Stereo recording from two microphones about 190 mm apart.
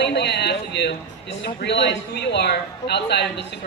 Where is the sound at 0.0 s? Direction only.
65° left (ahead or behind).